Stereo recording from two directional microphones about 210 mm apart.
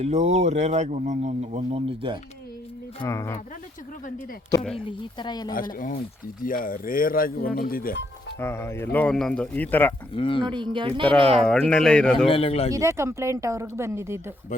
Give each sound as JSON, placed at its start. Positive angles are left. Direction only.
{"t": 0.0, "sound": "speech", "side_deg": -30}
{"t": 3.0, "sound": "speech", "side_deg": 15}
{"t": 4.9, "sound": "speech", "side_deg": 20}
{"t": 5.7, "sound": "speech", "side_deg": 45}
{"t": 8.4, "sound": "speech", "side_deg": 10}
{"t": 10.2, "sound": "speech", "side_deg": 25}
{"t": 10.4, "sound": "speech", "side_deg": -20}
{"t": 11.3, "sound": "speech", "side_deg": 5}
{"t": 12.3, "sound": "speech", "side_deg": 30}
{"t": 12.7, "sound": "speech", "side_deg": -15}